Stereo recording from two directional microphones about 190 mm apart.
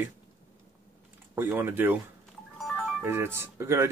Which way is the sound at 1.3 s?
10° right (ahead or behind).